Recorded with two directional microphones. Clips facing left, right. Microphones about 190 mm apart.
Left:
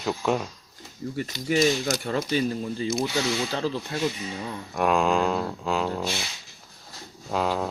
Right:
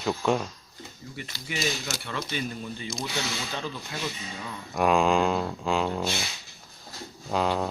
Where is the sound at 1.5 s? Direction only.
40° left (ahead or behind).